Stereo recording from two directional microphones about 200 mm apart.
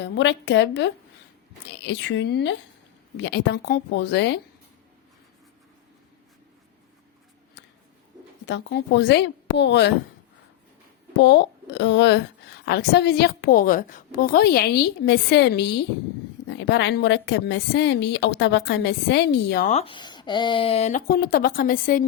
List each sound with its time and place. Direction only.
0.0 s a woman's voice: 60° left (ahead or behind)
7.6 s a sound: 60° left (ahead or behind)
8.4 s a woman's voice: 60° left (ahead or behind)
11.2 s a woman's voice: 60° left (ahead or behind)
19.6 s speech: 30° left (ahead or behind)